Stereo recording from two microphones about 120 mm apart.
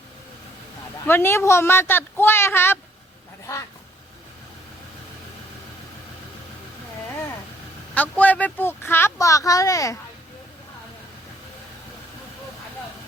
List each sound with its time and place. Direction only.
1.0 s speech: 20° left (ahead or behind)
7.9 s speech: 15° left (ahead or behind)